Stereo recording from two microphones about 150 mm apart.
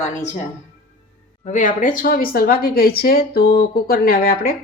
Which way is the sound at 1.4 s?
55° left (ahead or behind).